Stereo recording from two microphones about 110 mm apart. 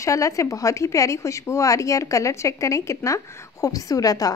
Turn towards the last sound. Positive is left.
turn(degrees=35)  # may be behind; listen again after turning